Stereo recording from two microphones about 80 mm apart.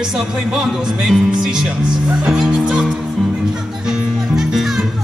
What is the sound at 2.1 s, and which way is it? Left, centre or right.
Speech, centre.